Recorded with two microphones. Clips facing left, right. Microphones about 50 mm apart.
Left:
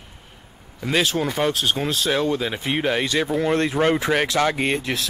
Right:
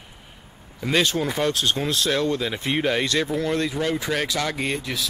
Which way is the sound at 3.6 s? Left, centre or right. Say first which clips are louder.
Left 5 dB; left.